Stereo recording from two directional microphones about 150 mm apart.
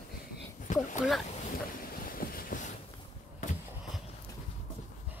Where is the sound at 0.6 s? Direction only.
55° left (ahead or behind).